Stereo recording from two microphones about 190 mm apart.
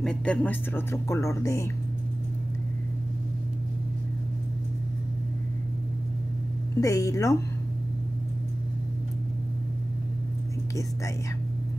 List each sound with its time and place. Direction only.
0.0 s speech: 5° left (ahead or behind)
6.8 s speech: 15° left (ahead or behind)